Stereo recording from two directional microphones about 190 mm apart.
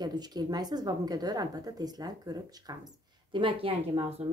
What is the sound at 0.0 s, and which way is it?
A woman's voice, 20° right (ahead or behind).